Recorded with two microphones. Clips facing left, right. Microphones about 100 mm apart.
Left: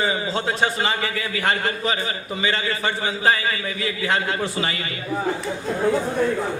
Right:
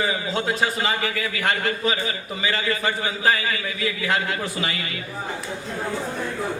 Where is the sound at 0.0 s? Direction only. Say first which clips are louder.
Left 1 dB; 30° left (ahead or behind).